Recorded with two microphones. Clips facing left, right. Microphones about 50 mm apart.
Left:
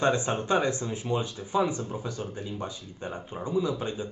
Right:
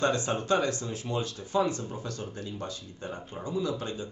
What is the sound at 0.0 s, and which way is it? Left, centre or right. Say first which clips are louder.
Speech: left 2 dB; left.